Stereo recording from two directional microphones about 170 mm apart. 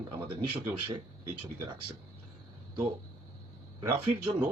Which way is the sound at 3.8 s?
25° right (ahead or behind).